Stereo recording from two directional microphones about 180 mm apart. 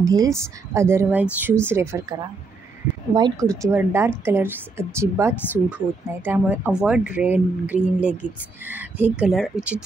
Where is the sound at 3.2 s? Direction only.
20° right (ahead or behind).